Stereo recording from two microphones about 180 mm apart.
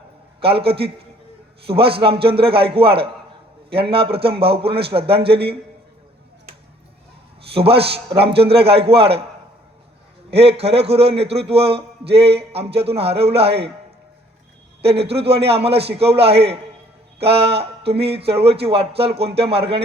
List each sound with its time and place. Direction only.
0.3 s a man's voice: 30° right (ahead or behind)
7.5 s a man's voice: 30° right (ahead or behind)
10.3 s a man's voice: 35° right (ahead or behind)
14.8 s a man's voice: 35° right (ahead or behind)